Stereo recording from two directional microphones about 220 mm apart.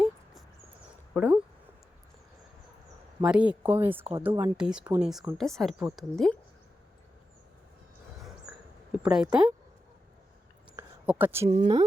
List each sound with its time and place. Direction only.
1.1 s speech: centre (ahead or behind)
3.2 s speech: 5° right (ahead or behind)
8.9 s speech: 5° right (ahead or behind)
10.8 s a sound: 10° right (ahead or behind)
11.4 s speech: 30° right (ahead or behind)